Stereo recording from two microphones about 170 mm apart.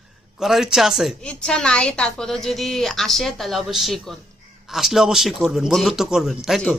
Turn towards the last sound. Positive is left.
turn(degrees=0)  # may be behind; listen again after turning